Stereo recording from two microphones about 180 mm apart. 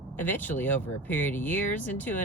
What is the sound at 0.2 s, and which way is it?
Speech, 10° left (ahead or behind).